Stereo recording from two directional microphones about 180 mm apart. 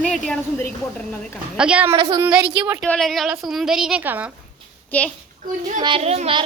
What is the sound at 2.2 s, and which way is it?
A woman's voice, 10° right (ahead or behind).